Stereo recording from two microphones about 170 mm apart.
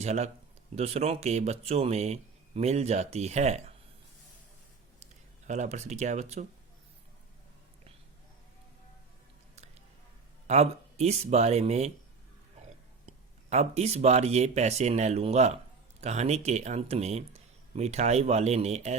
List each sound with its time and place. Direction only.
0.0 s speech: 40° right (ahead or behind)
5.5 s speech: 40° right (ahead or behind)
10.4 s speech: 40° right (ahead or behind)
12.6 s a sound: 45° right (ahead or behind)
13.1 s speech: 40° right (ahead or behind)